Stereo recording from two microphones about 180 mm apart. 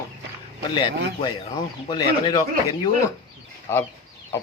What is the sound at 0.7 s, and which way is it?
Speech, 25° left (ahead or behind).